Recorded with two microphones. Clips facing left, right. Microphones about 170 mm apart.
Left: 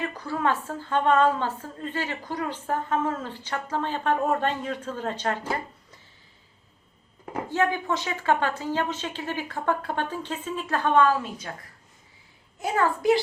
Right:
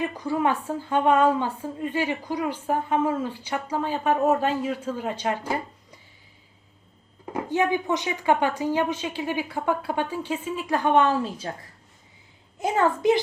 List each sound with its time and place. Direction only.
0.0 s a woman's voice: 15° right (ahead or behind)
7.5 s a woman's voice: 15° right (ahead or behind)
12.5 s a child's voice: 20° right (ahead or behind)